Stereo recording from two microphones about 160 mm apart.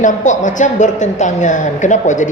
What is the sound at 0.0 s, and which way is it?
A woman's voice, 50° left (ahead or behind).